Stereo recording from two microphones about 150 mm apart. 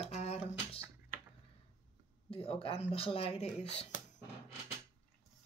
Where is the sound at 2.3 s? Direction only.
40° left (ahead or behind).